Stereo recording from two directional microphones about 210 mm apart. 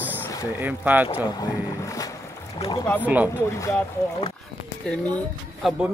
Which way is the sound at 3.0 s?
10° right (ahead or behind).